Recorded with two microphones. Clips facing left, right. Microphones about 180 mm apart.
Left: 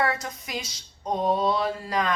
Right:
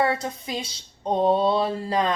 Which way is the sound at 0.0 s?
30° right (ahead or behind).